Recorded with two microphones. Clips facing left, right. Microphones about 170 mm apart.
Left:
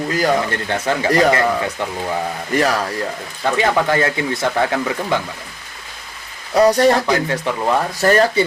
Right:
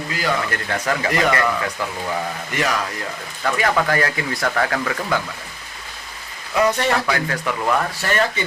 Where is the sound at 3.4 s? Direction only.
25° left (ahead or behind).